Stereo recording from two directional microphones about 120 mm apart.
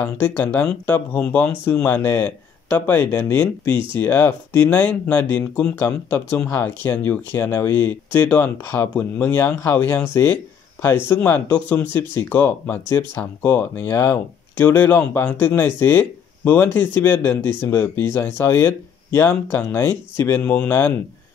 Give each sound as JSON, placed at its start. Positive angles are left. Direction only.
{"t": 0.0, "sound": "speech", "side_deg": 15}
{"t": 3.7, "sound": "speech", "side_deg": -45}
{"t": 4.0, "sound": "speech", "side_deg": 15}